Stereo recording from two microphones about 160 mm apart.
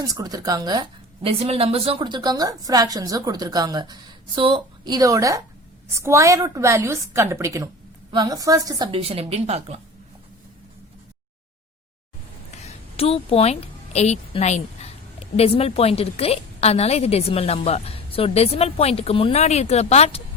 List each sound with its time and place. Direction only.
0.0 s a woman's voice: 25° right (ahead or behind)
8.9 s speech: 35° right (ahead or behind)
12.6 s a woman's voice: 35° left (ahead or behind)